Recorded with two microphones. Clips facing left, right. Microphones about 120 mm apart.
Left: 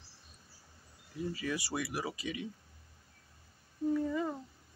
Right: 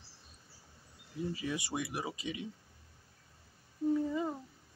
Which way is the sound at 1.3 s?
20° right (ahead or behind).